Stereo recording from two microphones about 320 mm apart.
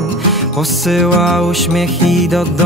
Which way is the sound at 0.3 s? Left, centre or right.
Centre.